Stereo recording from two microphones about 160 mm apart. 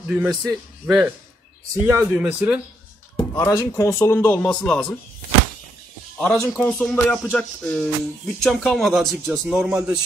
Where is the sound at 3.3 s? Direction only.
20° left (ahead or behind).